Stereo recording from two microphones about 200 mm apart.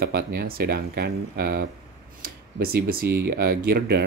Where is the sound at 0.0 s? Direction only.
50° right (ahead or behind).